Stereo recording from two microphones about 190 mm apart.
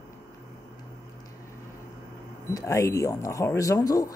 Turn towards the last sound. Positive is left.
turn(degrees=15)  # may be behind; listen again after turning